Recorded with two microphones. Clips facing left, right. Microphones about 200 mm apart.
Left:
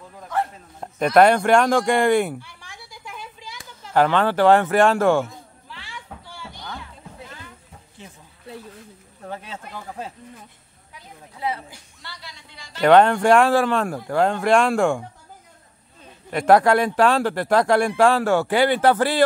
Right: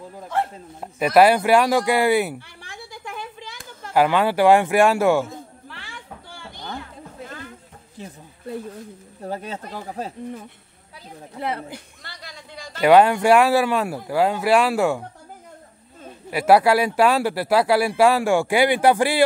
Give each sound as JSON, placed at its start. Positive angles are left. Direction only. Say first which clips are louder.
{"t": 0.7, "sound": "speech", "louder": "even", "side_deg": -5}
{"t": 2.4, "sound": "a sound", "louder": "right 4 dB", "side_deg": -55}
{"t": 3.9, "sound": "speech", "louder": "even", "side_deg": -10}
{"t": 5.7, "sound": "a sound", "louder": "even", "side_deg": -55}
{"t": 6.8, "sound": "music", "louder": "right 4 dB", "side_deg": -50}
{"t": 9.2, "sound": "speech", "louder": "right 4 dB", "side_deg": -35}
{"t": 11.3, "sound": "a sound", "louder": "right 1 dB", "side_deg": -60}
{"t": 12.8, "sound": "speech", "louder": "even", "side_deg": -10}
{"t": 16.3, "sound": "speech", "louder": "even", "side_deg": -5}